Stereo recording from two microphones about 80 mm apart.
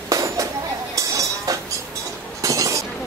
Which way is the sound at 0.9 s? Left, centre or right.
Right.